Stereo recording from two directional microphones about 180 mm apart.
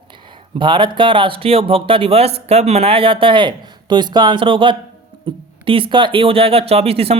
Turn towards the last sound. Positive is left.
turn(degrees=-35)  # may be behind; listen again after turning